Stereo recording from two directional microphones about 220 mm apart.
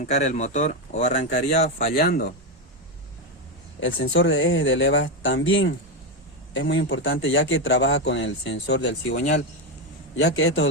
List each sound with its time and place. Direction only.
0.0 s speech: 35° left (ahead or behind)
3.8 s a man's voice: 60° left (ahead or behind)
9.1 s speech: 35° left (ahead or behind)
10.2 s a man's voice: 50° left (ahead or behind)